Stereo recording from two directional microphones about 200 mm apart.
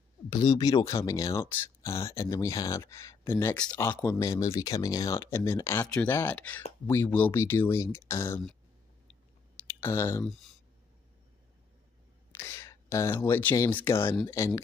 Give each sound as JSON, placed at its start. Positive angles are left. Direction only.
{"t": 0.3, "sound": "speech", "side_deg": 20}
{"t": 9.7, "sound": "speech", "side_deg": 15}
{"t": 12.4, "sound": "speech", "side_deg": 15}